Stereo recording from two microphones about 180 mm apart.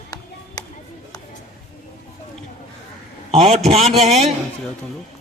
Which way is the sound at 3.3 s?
30° right (ahead or behind).